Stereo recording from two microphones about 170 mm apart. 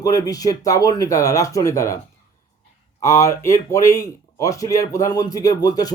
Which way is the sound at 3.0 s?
15° left (ahead or behind).